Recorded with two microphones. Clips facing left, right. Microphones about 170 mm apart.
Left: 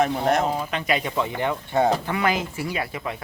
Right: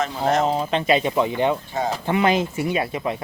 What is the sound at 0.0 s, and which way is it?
Speech, 55° left (ahead or behind).